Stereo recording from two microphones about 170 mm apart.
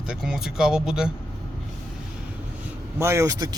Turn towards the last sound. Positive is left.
turn(degrees=-20)  # may be behind; listen again after turning